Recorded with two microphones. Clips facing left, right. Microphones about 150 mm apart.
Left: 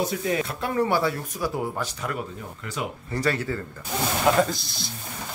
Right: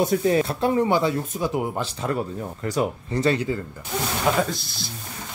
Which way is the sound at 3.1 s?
20° right (ahead or behind).